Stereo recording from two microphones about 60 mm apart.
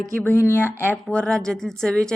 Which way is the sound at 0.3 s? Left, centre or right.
Left.